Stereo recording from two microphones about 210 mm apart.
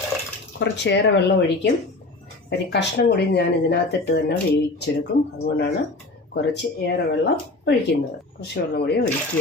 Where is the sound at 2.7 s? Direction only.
55° left (ahead or behind).